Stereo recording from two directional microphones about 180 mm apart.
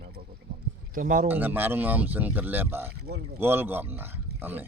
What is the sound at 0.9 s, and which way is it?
Speech, 50° right (ahead or behind).